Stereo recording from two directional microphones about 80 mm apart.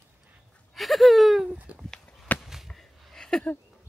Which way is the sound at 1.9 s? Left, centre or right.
Centre.